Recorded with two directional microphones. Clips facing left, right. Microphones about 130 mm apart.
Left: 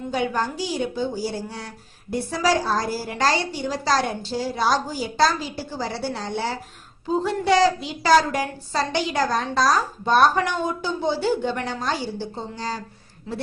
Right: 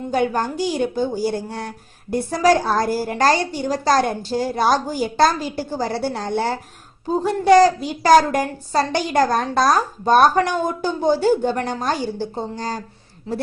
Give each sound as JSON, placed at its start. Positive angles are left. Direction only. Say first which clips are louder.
{"t": 0.1, "sound": "a woman's voice", "louder": "right 4 dB", "side_deg": -50}
{"t": 10.0, "sound": "a woman's voice", "louder": "right 4 dB", "side_deg": -45}